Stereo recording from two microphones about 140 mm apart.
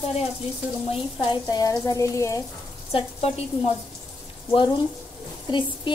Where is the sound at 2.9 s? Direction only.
45° left (ahead or behind).